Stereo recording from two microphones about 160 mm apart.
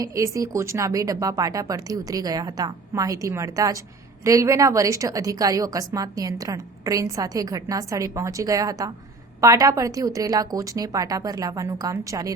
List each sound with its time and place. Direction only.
0.0 s a woman's voice: 20° right (ahead or behind)